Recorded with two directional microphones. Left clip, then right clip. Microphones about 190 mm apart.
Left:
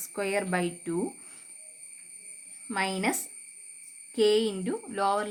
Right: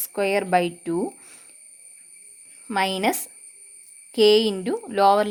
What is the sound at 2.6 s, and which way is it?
Speech, 45° right (ahead or behind).